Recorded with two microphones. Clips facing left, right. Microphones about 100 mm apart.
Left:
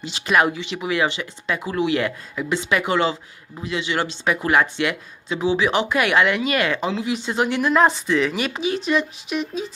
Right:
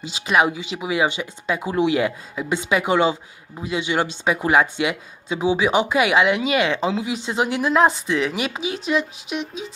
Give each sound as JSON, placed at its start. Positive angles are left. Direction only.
{"t": 0.1, "sound": "speech", "side_deg": -10}
{"t": 6.9, "sound": "speech", "side_deg": -10}
{"t": 8.6, "sound": "speech", "side_deg": -90}
{"t": 8.9, "sound": "speech", "side_deg": -15}